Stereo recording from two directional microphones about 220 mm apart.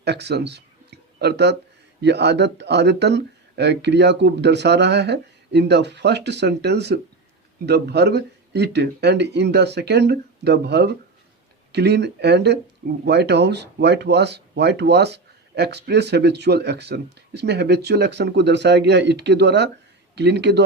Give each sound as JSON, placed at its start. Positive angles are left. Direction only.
{"t": 0.0, "sound": "speech", "side_deg": -50}